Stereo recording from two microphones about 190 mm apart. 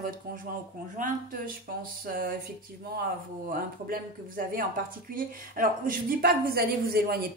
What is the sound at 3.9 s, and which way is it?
Speech, 50° right (ahead or behind).